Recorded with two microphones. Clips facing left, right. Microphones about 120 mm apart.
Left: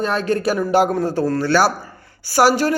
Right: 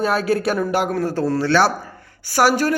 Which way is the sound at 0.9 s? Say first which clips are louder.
Left 1 dB; 15° left (ahead or behind).